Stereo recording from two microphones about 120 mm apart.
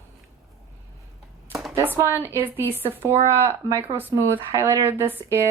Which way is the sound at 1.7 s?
20° right (ahead or behind).